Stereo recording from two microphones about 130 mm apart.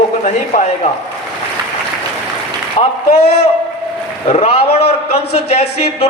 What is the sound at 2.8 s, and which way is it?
A man's voice, 50° left (ahead or behind).